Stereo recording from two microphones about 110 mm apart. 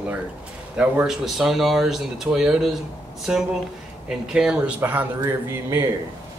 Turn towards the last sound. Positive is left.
turn(degrees=-20)  # may be behind; listen again after turning